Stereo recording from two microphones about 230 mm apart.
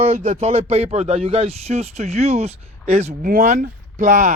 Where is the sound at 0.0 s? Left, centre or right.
Right.